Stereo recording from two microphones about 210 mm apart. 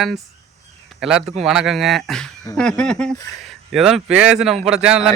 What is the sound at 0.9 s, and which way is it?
A man's voice, centre (ahead or behind).